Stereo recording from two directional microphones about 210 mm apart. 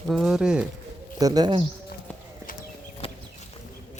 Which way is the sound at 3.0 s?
25° left (ahead or behind).